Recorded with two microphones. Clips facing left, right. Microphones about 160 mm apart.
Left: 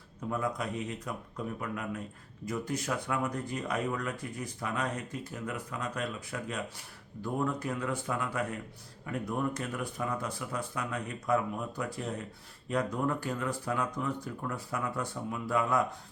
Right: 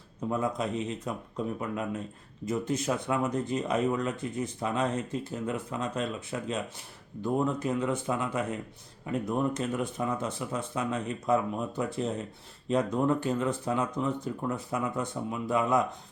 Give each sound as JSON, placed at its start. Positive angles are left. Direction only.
{"t": 0.3, "sound": "speech", "side_deg": -25}